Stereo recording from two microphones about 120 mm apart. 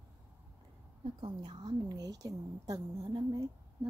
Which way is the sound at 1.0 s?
45° right (ahead or behind).